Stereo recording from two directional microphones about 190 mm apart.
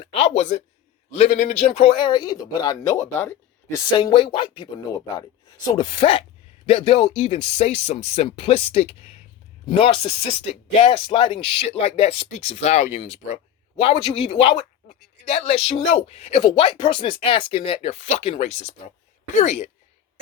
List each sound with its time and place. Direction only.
0.0 s speech: 35° left (ahead or behind)
5.7 s speech: 25° left (ahead or behind)